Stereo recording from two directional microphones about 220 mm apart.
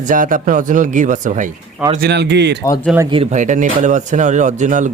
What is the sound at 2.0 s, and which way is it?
Speech, 50° right (ahead or behind).